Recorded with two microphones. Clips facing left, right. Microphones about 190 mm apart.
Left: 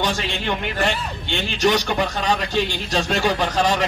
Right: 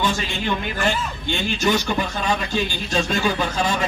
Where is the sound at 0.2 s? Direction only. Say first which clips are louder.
Even; 70° left (ahead or behind).